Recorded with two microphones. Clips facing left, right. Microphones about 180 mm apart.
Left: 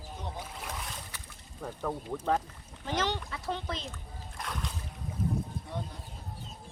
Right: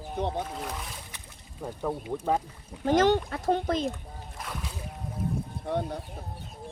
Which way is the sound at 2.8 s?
50° right (ahead or behind).